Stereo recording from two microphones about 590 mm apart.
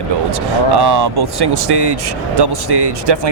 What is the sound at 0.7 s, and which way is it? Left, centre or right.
Speech, right.